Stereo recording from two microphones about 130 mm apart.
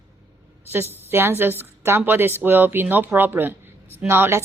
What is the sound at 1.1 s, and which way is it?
A woman's voice, 15° right (ahead or behind).